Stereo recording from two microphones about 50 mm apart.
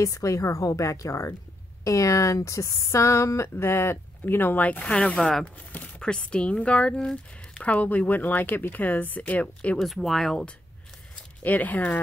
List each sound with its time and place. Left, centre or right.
0.0 s a woman's voice: left
4.6 s a woman's voice: left
7.6 s a woman's voice: left
9.8 s speech: centre
11.4 s speech: left